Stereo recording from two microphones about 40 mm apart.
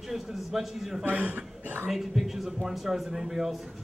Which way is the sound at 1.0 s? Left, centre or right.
Right.